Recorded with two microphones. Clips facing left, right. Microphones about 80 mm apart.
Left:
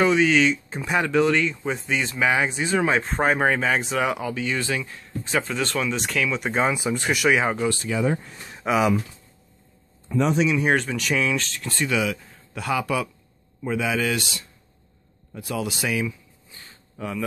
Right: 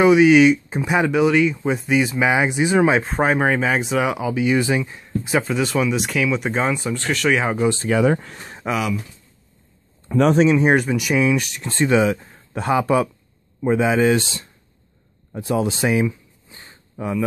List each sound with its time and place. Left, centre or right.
0.0 s speech: centre
7.5 s speech: right
7.9 s speech: right
8.6 s speech: centre
10.0 s speech: right
10.3 s speech: right
10.7 s speech: centre; by 14.5 s right
15.3 s a sound: right